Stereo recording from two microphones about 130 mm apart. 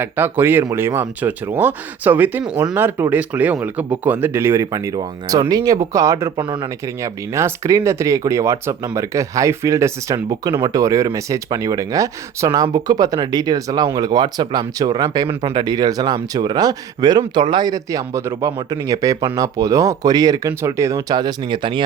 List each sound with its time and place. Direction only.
0.0 s speech: 15° right (ahead or behind); by 21.8 s 40° right (ahead or behind)